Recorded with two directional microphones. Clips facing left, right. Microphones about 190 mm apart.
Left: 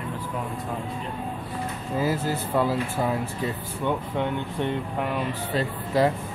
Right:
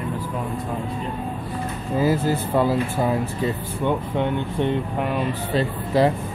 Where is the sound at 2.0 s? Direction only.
30° right (ahead or behind).